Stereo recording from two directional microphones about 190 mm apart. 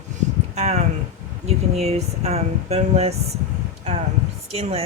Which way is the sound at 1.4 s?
35° right (ahead or behind).